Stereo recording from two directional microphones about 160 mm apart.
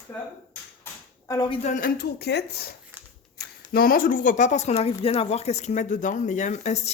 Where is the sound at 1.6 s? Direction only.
55° left (ahead or behind).